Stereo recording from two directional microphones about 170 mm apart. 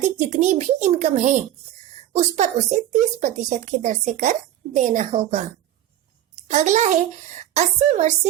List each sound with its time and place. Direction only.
0.0 s a child's voice: 40° right (ahead or behind)